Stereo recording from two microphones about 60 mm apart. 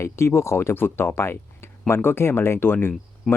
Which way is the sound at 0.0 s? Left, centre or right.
Left.